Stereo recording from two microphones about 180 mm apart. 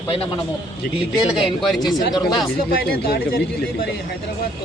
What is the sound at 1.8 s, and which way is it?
Speech, 25° left (ahead or behind).